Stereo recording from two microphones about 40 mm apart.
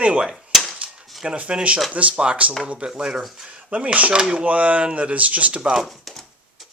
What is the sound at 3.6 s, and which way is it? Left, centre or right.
Speech, right.